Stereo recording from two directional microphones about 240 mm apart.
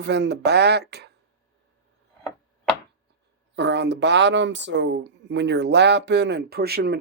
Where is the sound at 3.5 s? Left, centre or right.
Right.